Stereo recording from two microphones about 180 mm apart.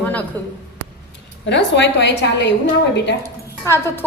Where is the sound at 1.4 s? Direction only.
80° left.